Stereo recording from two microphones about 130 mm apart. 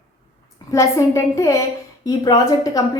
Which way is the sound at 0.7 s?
25° left (ahead or behind).